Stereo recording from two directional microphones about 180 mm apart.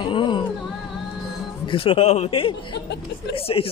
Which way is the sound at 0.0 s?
25° left (ahead or behind).